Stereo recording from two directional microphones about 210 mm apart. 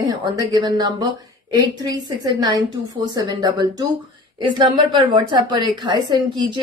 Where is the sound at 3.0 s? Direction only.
20° right (ahead or behind).